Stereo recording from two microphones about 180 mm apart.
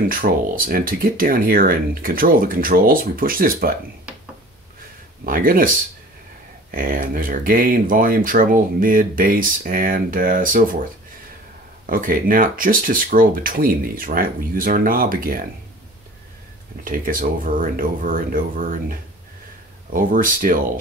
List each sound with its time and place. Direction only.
0.1 s speech: 50° right (ahead or behind)
5.2 s speech: 50° right (ahead or behind)
6.7 s speech: 50° right (ahead or behind)
16.8 s speech: 50° right (ahead or behind)